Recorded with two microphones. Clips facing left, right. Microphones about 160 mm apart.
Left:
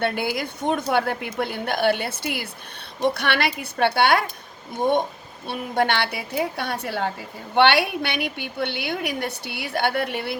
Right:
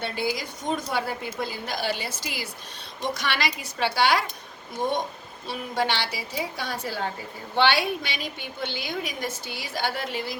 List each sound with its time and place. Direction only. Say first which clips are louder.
0.0 s a woman's voice: left 4 dB; 60° left (ahead or behind)